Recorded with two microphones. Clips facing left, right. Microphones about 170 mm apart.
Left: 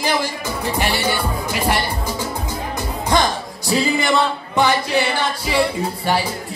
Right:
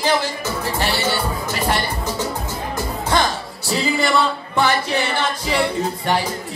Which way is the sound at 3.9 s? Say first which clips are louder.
Even; 20° left (ahead or behind).